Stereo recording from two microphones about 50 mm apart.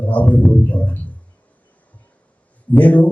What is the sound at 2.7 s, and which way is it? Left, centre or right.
Speech, left.